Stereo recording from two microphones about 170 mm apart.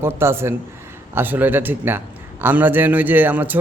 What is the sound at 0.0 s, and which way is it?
A man's voice, 15° right (ahead or behind).